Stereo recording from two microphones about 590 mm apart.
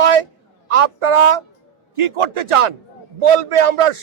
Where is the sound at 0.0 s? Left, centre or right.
Right.